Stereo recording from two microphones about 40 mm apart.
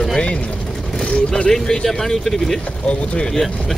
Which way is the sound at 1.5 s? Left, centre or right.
Centre.